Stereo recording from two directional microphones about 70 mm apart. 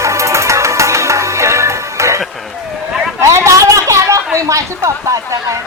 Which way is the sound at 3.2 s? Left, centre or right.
Right.